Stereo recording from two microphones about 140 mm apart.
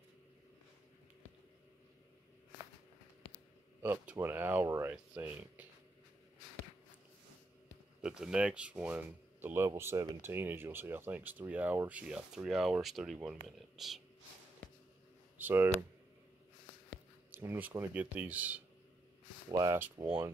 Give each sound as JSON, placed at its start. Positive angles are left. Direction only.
{"t": 3.8, "sound": "speech", "side_deg": -10}
{"t": 8.0, "sound": "speech", "side_deg": -5}
{"t": 15.3, "sound": "speech", "side_deg": -15}
{"t": 17.3, "sound": "speech", "side_deg": -15}
{"t": 19.5, "sound": "speech", "side_deg": -25}